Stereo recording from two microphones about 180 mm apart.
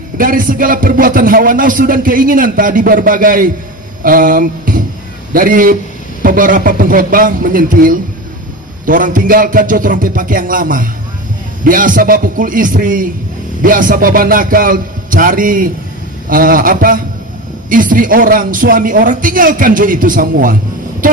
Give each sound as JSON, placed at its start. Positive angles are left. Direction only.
{"t": 0.2, "sound": "a man's voice", "side_deg": -50}
{"t": 4.0, "sound": "a sound", "side_deg": -50}
{"t": 5.3, "sound": "a man's voice", "side_deg": -50}